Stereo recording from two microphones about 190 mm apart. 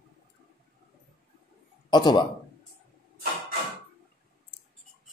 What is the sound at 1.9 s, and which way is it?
Speech, 20° left (ahead or behind).